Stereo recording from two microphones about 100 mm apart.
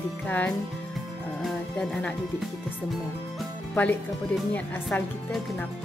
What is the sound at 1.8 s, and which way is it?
Music, 10° left (ahead or behind).